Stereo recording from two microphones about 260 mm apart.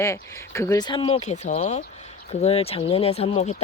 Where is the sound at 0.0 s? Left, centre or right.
Centre.